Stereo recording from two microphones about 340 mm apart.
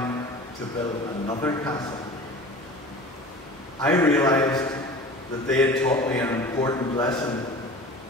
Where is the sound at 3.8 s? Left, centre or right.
Centre.